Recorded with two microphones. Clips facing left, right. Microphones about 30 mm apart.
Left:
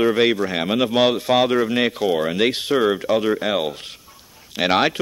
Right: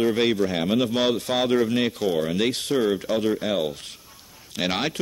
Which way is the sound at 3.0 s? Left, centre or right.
Centre.